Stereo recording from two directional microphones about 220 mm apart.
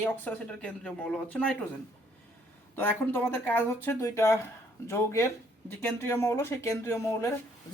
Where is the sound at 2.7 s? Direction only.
10° left (ahead or behind).